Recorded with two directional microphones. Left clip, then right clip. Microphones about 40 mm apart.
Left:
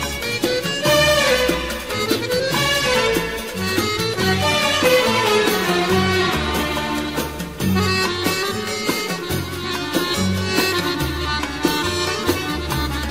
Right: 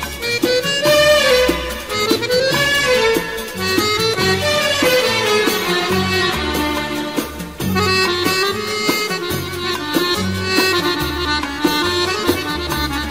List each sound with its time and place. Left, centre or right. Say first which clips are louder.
0.3 s music: right 6 dB; right
7.7 s music: right 5 dB; right
9.9 s music: right 3 dB; right